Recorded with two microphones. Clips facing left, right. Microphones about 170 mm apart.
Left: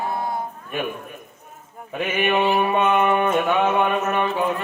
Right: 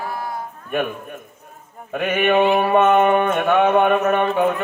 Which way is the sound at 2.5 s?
55° right (ahead or behind).